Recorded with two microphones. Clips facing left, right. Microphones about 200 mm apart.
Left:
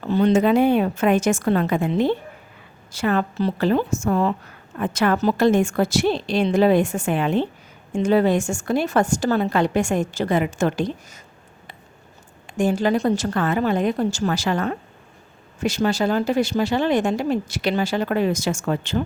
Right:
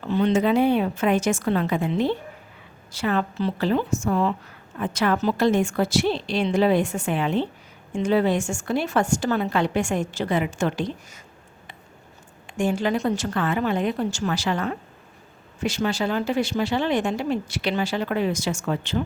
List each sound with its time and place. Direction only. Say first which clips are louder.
0.1 s speech: left 3 dB; 40° left (ahead or behind)
12.5 s a woman's voice: left 3 dB; 40° left (ahead or behind)